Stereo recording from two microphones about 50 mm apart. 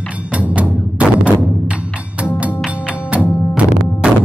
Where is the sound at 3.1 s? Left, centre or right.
Right.